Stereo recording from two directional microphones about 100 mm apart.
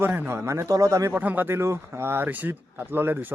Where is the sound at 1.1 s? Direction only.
15° right (ahead or behind).